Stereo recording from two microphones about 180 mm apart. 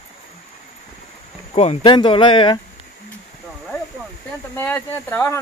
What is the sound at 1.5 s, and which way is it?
Speech, 35° left (ahead or behind).